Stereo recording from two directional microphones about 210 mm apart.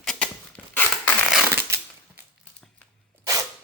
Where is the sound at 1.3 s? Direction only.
5° right (ahead or behind).